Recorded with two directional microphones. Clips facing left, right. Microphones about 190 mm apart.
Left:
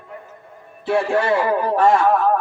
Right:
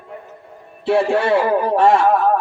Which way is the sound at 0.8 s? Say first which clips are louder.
Right 2 dB; 30° right (ahead or behind).